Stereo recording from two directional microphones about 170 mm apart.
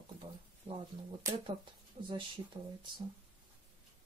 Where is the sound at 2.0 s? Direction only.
35° right (ahead or behind).